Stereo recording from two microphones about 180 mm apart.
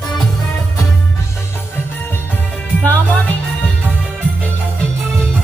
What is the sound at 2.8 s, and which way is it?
Music, 10° left (ahead or behind).